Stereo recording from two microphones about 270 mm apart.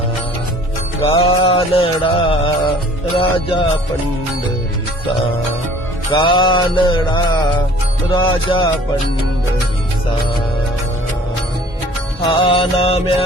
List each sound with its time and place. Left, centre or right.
1.0 s music: centre
6.1 s music: centre
12.3 s music: centre